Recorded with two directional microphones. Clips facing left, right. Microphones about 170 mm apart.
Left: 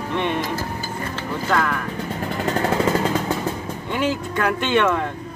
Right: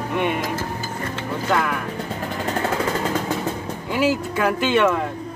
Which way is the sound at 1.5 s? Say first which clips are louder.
Even; 10° right (ahead or behind).